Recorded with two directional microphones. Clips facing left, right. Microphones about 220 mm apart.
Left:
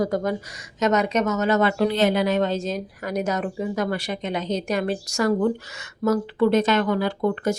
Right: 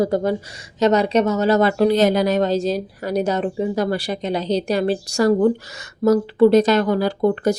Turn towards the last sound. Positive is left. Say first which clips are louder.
# right 5 dB
turn(degrees=-35)  # may be behind; listen again after turning